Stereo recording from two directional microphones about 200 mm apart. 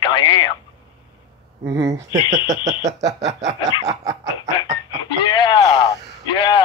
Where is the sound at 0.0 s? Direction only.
25° left (ahead or behind).